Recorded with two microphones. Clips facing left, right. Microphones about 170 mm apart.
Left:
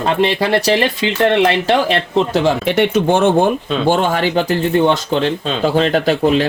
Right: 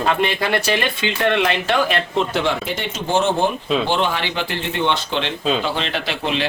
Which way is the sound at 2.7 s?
60° left (ahead or behind).